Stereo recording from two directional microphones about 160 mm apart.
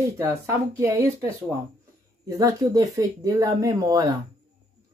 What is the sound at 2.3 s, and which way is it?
Speech, 20° right (ahead or behind).